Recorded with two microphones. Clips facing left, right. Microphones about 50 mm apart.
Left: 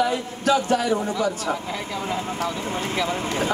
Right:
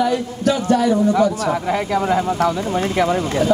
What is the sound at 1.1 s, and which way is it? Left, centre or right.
A man's voice, right.